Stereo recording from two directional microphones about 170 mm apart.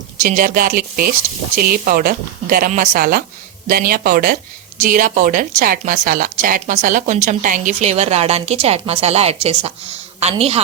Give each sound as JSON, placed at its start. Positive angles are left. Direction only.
{"t": 0.2, "sound": "a woman's voice", "side_deg": -50}
{"t": 4.8, "sound": "a woman's voice", "side_deg": -55}